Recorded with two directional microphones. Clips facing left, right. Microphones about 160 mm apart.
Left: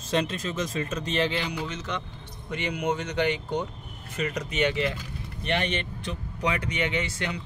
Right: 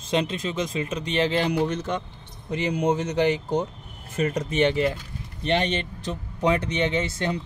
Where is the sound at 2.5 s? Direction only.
35° right (ahead or behind).